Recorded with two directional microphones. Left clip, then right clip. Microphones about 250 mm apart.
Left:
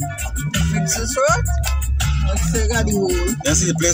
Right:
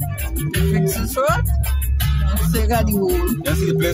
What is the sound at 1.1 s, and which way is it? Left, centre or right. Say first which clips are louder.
Music: left 2 dB; centre.